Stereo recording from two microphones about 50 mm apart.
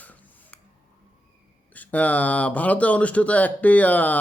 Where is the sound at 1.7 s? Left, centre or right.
Left.